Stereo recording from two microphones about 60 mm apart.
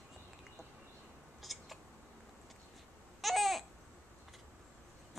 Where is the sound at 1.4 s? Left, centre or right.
Centre.